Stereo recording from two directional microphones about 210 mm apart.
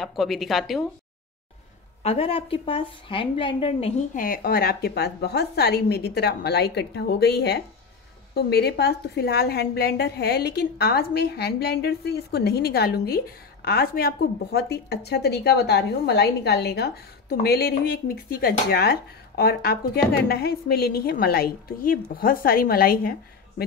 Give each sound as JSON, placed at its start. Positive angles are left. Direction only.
{"t": 0.0, "sound": "speech", "side_deg": 0}
{"t": 2.0, "sound": "speech", "side_deg": 25}